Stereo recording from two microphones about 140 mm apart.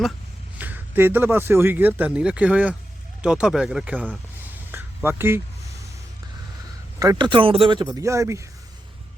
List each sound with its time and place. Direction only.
0.6 s speech: 15° right (ahead or behind)
7.2 s speech: 35° right (ahead or behind)
7.9 s speech: 20° right (ahead or behind)